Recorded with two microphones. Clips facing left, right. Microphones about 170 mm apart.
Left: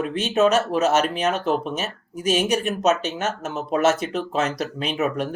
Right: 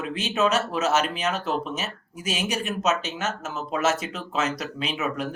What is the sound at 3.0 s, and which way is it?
Speech, 55° left (ahead or behind).